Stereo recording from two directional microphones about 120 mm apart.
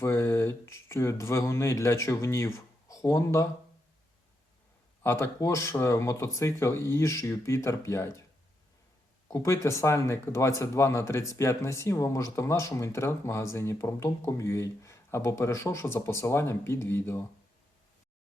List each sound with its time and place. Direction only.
0.0 s speech: 20° left (ahead or behind)
5.0 s speech: 20° left (ahead or behind)
9.3 s speech: 25° left (ahead or behind)